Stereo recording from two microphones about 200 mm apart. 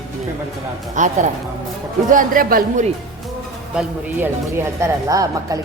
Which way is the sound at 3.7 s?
10° right (ahead or behind).